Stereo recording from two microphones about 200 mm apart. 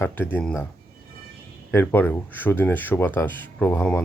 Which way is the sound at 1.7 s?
10° left (ahead or behind).